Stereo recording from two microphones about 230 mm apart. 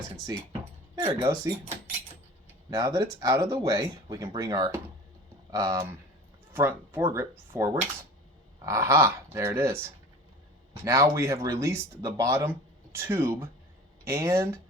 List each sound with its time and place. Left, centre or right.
0.9 s speech: right